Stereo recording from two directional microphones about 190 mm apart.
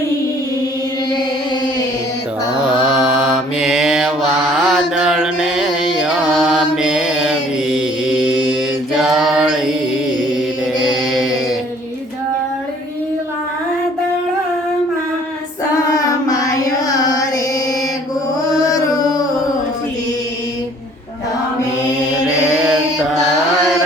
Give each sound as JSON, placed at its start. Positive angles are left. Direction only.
{"t": 2.8, "sound": "mantra", "side_deg": -10}
{"t": 10.8, "sound": "chant", "side_deg": 0}
{"t": 16.2, "sound": "carnatic music", "side_deg": 15}
{"t": 18.6, "sound": "music", "side_deg": 20}
{"t": 22.1, "sound": "mantra", "side_deg": -5}